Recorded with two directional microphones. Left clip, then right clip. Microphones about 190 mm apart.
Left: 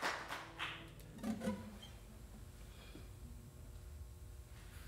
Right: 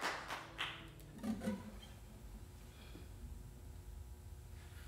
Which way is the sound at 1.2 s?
15° left (ahead or behind).